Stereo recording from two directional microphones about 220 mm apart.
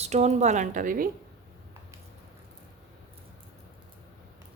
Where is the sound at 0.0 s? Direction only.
30° right (ahead or behind).